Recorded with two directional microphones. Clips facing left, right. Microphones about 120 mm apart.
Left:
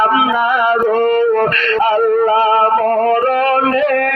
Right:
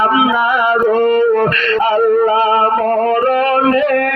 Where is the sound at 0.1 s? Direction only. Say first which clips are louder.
Right 1 dB; 45° left (ahead or behind).